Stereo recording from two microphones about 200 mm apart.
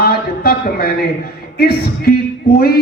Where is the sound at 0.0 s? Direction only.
50° left (ahead or behind).